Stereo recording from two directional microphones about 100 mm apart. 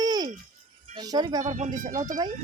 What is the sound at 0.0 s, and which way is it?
Music, 40° right (ahead or behind).